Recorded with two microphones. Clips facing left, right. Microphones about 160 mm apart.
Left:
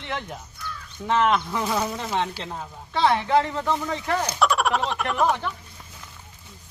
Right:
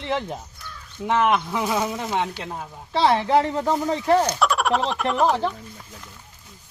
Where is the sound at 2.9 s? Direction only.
30° right (ahead or behind).